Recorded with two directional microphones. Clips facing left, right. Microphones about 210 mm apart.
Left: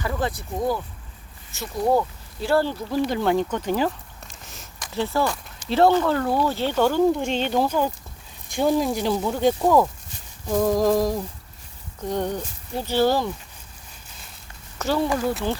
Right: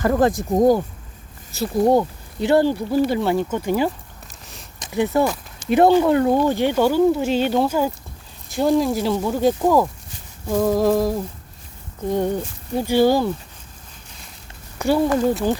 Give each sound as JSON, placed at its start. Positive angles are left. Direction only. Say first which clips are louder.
{"t": 0.0, "sound": "speech", "louder": "right 9 dB", "side_deg": -45}
{"t": 1.8, "sound": "speech", "louder": "right 4 dB", "side_deg": -25}
{"t": 3.1, "sound": "speech", "louder": "right 2 dB", "side_deg": -5}
{"t": 4.8, "sound": "speech", "louder": "right 5 dB", "side_deg": -15}
{"t": 14.8, "sound": "speech", "louder": "right 5 dB", "side_deg": -10}